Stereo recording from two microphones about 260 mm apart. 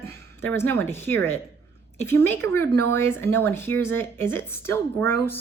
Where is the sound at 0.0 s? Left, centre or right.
Centre.